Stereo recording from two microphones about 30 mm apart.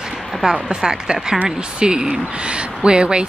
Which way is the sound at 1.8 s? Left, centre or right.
Right.